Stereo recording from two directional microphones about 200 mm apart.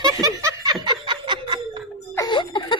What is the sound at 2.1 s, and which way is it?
Whimper, 20° left (ahead or behind).